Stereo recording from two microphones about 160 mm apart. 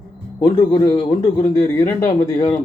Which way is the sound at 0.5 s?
25° left (ahead or behind).